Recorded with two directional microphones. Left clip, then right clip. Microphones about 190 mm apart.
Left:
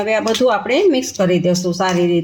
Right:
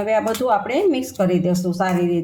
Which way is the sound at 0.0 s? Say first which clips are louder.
Left 4 dB; 40° left (ahead or behind).